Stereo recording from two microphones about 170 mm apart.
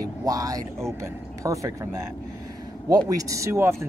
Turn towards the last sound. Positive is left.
turn(degrees=-15)  # may be behind; listen again after turning